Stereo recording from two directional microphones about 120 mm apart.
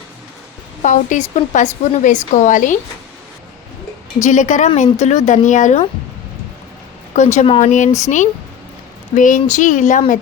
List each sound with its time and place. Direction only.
0.8 s speech: 85° left
4.2 s speech: 90° left
4.8 s speech: 70° left (ahead or behind); by 5.8 s 90° left
7.2 s speech: 75° left (ahead or behind)
7.6 s speech: 90° left